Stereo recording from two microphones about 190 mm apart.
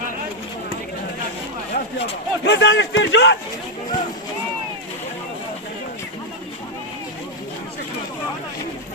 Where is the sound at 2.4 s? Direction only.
70° left (ahead or behind).